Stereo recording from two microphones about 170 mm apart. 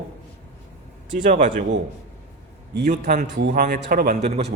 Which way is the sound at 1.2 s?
45° right (ahead or behind).